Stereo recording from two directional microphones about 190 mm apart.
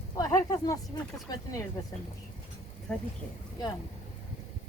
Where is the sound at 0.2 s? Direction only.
15° left (ahead or behind).